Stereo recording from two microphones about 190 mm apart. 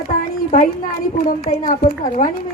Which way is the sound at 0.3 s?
45° left (ahead or behind).